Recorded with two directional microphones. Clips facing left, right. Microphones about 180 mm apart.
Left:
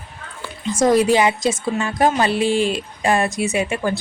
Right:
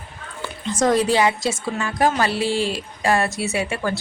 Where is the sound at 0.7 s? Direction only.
10° left (ahead or behind).